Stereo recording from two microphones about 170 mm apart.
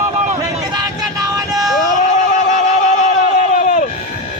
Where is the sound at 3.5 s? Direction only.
45° left (ahead or behind).